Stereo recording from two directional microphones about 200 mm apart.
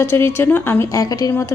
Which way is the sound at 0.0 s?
10° left (ahead or behind).